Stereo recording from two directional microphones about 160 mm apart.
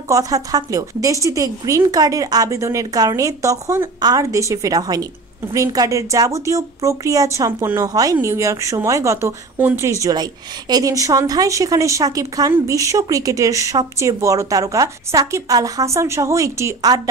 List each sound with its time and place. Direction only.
0.1 s a woman's voice: 20° right (ahead or behind)